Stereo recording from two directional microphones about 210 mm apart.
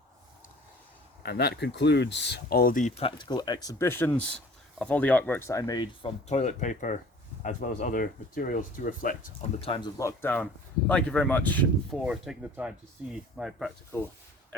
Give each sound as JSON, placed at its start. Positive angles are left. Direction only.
{"t": 1.2, "sound": "speech", "side_deg": 50}
{"t": 3.0, "sound": "speech", "side_deg": 25}
{"t": 9.6, "sound": "speech", "side_deg": 25}